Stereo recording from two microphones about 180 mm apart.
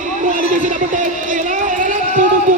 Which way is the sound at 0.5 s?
45° right (ahead or behind).